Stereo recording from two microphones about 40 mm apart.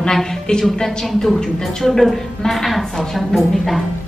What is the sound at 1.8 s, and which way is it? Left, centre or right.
Speech, centre.